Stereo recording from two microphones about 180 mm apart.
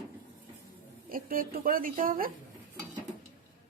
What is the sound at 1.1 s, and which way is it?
A woman's voice, 50° right (ahead or behind).